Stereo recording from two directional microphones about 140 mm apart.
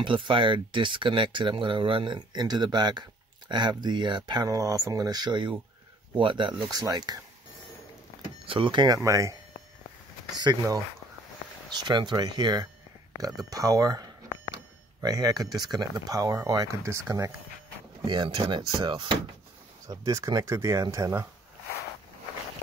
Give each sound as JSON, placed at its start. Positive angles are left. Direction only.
{"t": 0.0, "sound": "speech", "side_deg": -35}
{"t": 8.5, "sound": "speech", "side_deg": -35}
{"t": 10.4, "sound": "speech", "side_deg": -25}
{"t": 11.8, "sound": "speech", "side_deg": -30}
{"t": 13.2, "sound": "a sound", "side_deg": -25}
{"t": 15.6, "sound": "speech", "side_deg": -30}
{"t": 18.0, "sound": "speech", "side_deg": -35}
{"t": 19.9, "sound": "speech", "side_deg": -20}